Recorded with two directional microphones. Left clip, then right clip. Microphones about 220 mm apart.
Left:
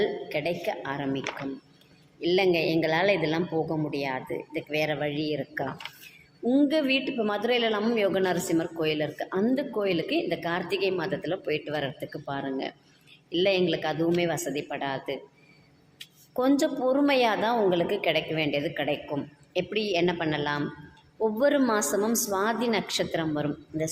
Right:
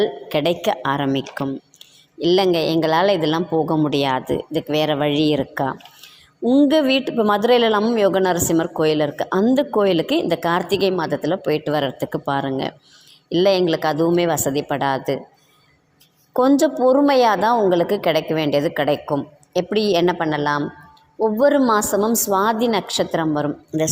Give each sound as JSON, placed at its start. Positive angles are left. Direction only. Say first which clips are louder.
{"t": 0.0, "sound": "a woman's voice", "louder": "right 8 dB", "side_deg": -30}
{"t": 2.2, "sound": "a woman's voice", "louder": "right 7 dB", "side_deg": -30}
{"t": 6.4, "sound": "a woman's voice", "louder": "right 9 dB", "side_deg": -20}
{"t": 16.3, "sound": "a woman's voice", "louder": "right 9 dB", "side_deg": -25}